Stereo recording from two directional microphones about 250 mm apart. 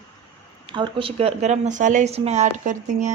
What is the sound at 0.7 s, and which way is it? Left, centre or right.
Speech, centre.